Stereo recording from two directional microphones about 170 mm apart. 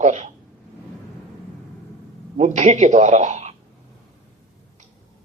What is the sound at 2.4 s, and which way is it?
A woman's voice, 40° right (ahead or behind).